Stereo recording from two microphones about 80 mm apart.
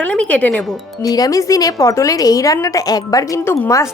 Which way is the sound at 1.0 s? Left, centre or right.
Left.